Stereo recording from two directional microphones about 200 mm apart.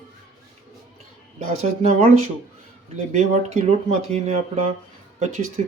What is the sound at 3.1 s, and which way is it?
Speech, 30° right (ahead or behind).